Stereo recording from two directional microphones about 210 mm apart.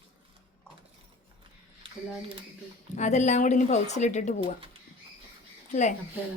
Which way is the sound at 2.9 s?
35° left (ahead or behind).